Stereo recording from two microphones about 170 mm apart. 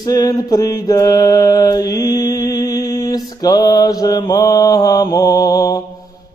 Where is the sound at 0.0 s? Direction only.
25° left (ahead or behind).